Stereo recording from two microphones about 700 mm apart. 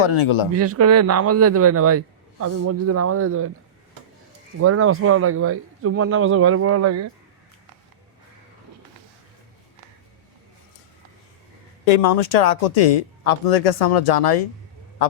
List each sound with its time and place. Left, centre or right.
0.0 s speech: left
0.5 s a man's voice: centre
4.6 s a man's voice: centre
11.9 s speech: left